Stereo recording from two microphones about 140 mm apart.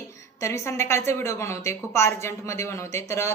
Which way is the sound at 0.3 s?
20° left (ahead or behind).